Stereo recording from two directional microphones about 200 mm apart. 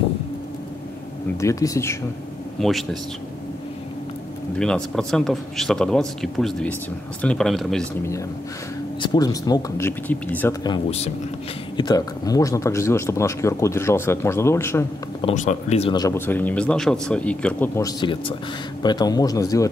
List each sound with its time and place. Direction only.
1.4 s a man's voice: 15° left (ahead or behind)
2.6 s speech: centre (ahead or behind)
4.6 s speech: 5° left (ahead or behind)
9.0 s a man's voice: 20° left (ahead or behind)
10.6 s a man's voice: 25° left (ahead or behind)
15.2 s speech: 35° left (ahead or behind)
15.9 s a man's voice: 15° left (ahead or behind)